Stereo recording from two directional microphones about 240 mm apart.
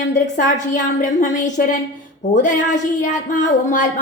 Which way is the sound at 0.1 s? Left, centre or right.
Left.